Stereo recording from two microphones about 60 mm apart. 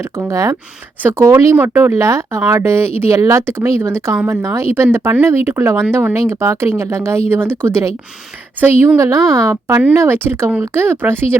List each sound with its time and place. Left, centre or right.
0.3 s a woman's voice: right
1.5 s speech: right
3.2 s a woman's voice: right
3.4 s speech: right
7.6 s speech: right
8.6 s speech: right
9.0 s a woman's voice: right
9.9 s speech: right